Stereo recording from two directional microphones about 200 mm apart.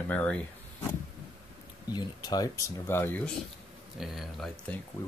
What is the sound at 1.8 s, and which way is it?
Speech, 20° left (ahead or behind).